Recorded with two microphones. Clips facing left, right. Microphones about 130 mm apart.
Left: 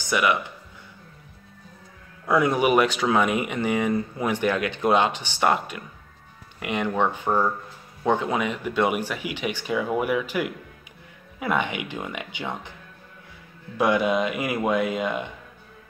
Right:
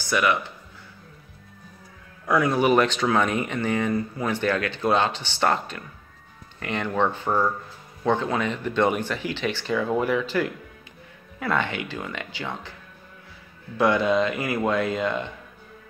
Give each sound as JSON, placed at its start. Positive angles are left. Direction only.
{"t": 0.0, "sound": "speech", "side_deg": 15}
{"t": 2.2, "sound": "speech", "side_deg": 20}
{"t": 13.7, "sound": "speech", "side_deg": 15}